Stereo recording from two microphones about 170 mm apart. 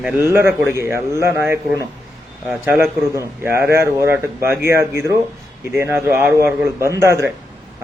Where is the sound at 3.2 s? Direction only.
15° right (ahead or behind).